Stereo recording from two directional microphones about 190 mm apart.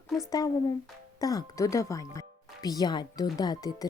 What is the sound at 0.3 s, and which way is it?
Speech, 20° left (ahead or behind).